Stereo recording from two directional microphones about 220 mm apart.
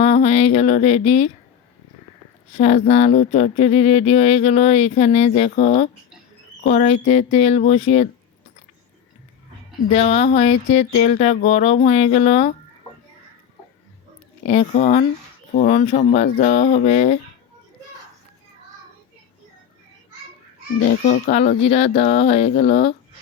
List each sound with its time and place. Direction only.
0.0 s speech: 30° left (ahead or behind)
2.5 s speech: 30° left (ahead or behind)
9.9 s speech: 30° left (ahead or behind)
14.4 s speech: 30° left (ahead or behind)
21.1 s speech: 35° left (ahead or behind)